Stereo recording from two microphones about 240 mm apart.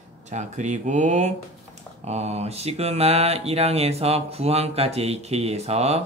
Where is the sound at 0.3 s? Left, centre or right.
Right.